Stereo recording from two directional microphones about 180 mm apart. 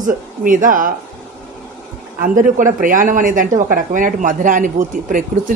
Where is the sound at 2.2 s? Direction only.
50° right (ahead or behind).